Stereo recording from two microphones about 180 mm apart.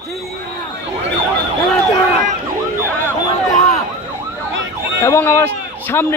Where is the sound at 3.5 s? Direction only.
45° left (ahead or behind).